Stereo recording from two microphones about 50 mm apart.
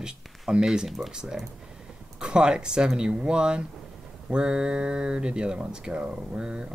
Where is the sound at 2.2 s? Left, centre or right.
Centre.